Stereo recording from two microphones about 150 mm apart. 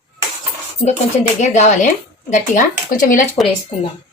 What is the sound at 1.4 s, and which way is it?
A woman's voice, 50° left (ahead or behind).